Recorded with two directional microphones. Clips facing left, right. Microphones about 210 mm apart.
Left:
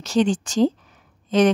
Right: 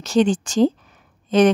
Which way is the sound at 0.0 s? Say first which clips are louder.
Right 2 dB; 55° right (ahead or behind).